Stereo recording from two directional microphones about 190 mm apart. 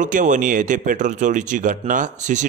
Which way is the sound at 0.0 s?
40° right (ahead or behind).